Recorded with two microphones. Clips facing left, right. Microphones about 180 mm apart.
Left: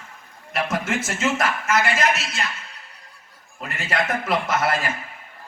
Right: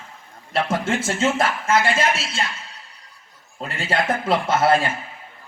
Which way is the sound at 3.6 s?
30° right (ahead or behind).